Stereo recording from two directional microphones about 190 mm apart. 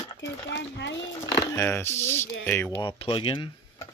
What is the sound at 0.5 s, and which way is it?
Speech, 65° left (ahead or behind).